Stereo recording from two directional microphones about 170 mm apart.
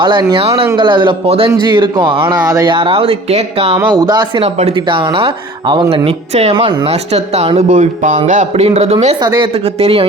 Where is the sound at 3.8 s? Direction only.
25° right (ahead or behind); by 9.1 s 40° right (ahead or behind).